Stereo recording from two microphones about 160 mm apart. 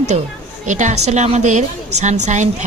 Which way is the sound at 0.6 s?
50° right (ahead or behind).